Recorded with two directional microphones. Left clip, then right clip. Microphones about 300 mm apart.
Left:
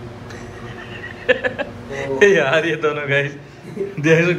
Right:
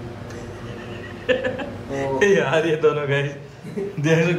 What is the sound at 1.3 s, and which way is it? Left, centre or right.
A man's voice, centre.